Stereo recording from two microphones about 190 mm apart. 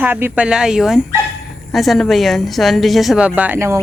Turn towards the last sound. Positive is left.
turn(degrees=-15)  # may be behind; listen again after turning